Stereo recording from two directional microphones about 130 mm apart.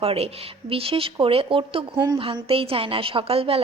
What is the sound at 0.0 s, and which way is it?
A woman's voice, 50° right (ahead or behind).